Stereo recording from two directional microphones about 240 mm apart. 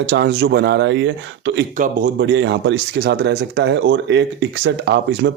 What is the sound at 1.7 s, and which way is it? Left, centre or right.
Speech, right.